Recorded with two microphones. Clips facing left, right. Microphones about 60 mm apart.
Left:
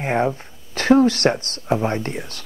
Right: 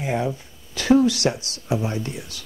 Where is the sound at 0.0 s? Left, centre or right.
Left.